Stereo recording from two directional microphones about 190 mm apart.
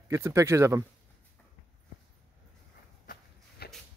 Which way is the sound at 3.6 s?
55° left (ahead or behind).